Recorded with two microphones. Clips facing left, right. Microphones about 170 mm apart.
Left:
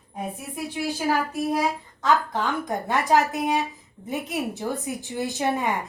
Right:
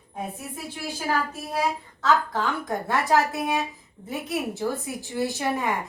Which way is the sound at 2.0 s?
20° left (ahead or behind).